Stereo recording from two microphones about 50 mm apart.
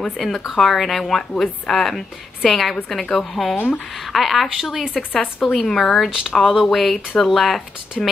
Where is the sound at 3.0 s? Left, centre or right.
Centre.